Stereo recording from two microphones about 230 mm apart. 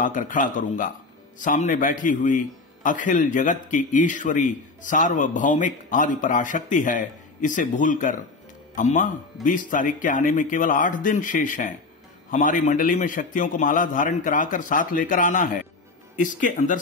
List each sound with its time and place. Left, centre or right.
0.0 s a man's voice: left